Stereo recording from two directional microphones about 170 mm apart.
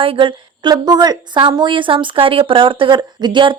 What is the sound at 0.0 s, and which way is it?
A woman's voice, 30° right (ahead or behind).